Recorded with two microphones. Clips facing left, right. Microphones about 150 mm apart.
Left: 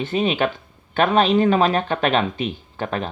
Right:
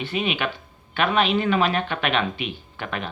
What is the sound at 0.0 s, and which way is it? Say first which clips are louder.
Speech: left 5 dB; 40° left (ahead or behind).